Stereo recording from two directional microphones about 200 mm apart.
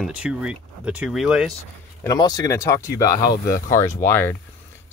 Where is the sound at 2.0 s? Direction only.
20° left (ahead or behind).